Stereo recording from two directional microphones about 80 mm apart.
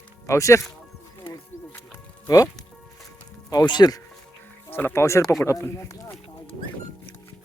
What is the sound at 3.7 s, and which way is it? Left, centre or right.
Speech, left.